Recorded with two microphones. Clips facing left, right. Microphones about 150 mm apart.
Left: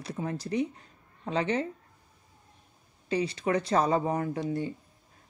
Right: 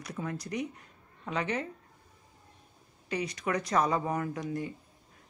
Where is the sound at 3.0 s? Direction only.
30° left (ahead or behind).